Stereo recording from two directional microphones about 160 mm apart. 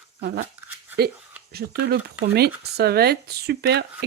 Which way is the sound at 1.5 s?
75° right (ahead or behind).